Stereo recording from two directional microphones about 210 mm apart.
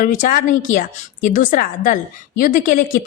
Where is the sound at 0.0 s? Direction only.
40° left (ahead or behind).